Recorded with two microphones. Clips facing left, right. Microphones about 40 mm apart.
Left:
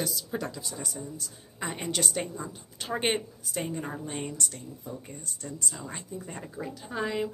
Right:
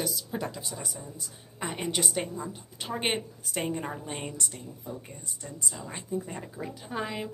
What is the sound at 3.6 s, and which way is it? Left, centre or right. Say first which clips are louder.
Speech: right 2 dB; right.